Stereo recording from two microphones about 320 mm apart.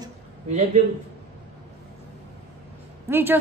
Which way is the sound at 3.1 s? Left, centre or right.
Centre.